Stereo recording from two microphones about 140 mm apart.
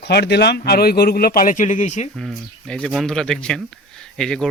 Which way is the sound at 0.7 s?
90° left.